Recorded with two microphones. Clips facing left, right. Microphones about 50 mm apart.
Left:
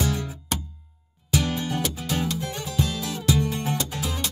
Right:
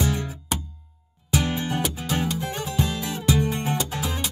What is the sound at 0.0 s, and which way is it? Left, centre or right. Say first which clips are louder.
Music: right 1 dB; right.